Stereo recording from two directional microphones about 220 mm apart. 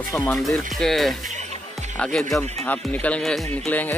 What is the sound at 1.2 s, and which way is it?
Music, 35° right (ahead or behind).